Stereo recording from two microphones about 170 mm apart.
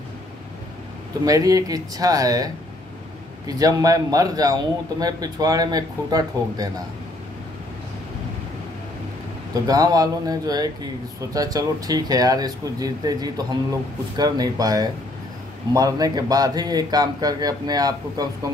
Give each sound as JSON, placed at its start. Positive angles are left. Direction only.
{"t": 1.2, "sound": "a man's voice", "side_deg": -20}
{"t": 9.5, "sound": "a man's voice", "side_deg": -20}